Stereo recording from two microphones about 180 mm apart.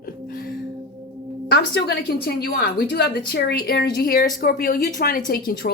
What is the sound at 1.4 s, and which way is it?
A woman's voice, 65° left (ahead or behind).